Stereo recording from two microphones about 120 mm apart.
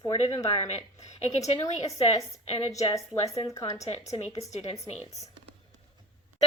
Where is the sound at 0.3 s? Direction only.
50° left (ahead or behind).